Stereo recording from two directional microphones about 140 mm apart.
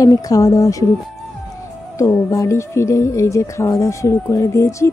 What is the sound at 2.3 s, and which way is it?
Speech, 20° left (ahead or behind).